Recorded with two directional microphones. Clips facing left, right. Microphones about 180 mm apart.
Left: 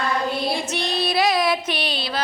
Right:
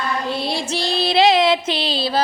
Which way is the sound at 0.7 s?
30° right (ahead or behind).